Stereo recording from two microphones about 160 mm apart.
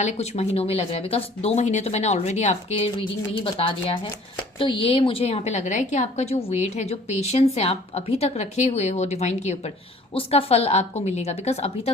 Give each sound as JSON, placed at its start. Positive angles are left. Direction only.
{"t": 0.0, "sound": "a woman's voice", "side_deg": 45}